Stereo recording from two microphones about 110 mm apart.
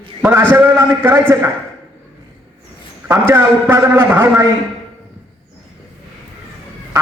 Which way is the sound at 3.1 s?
20° right (ahead or behind).